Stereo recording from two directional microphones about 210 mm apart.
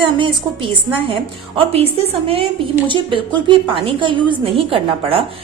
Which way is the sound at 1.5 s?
25° right (ahead or behind).